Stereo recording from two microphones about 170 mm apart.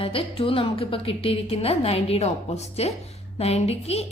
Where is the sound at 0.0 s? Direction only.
35° left (ahead or behind).